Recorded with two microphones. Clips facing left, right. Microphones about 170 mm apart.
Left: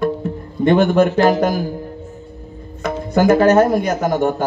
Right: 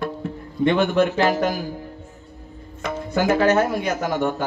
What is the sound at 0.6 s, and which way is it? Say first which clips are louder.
A man's voice: left 5 dB; 45° left (ahead or behind).